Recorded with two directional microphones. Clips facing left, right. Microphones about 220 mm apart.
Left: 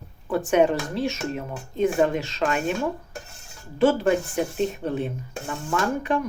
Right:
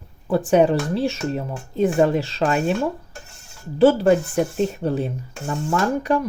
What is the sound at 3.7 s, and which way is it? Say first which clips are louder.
Speech: right 5 dB; 35° right (ahead or behind).